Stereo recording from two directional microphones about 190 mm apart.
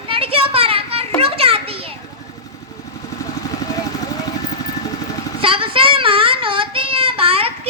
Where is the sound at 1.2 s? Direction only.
30° right (ahead or behind).